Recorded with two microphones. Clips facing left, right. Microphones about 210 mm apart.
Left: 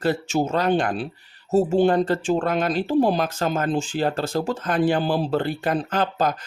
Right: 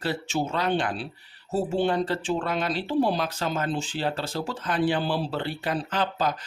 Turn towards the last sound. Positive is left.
turn(degrees=45)  # may be behind; listen again after turning